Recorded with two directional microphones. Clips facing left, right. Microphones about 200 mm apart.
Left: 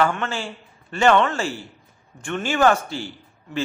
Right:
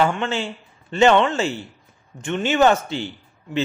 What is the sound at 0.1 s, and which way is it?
Speech, 20° right (ahead or behind).